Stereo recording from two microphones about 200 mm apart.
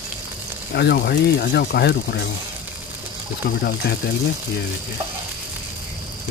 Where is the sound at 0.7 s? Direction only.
55° left (ahead or behind).